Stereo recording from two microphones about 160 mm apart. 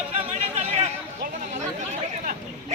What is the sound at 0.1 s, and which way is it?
Chatter, 40° right (ahead or behind).